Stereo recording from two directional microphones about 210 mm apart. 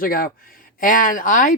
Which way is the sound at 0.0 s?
45° left (ahead or behind).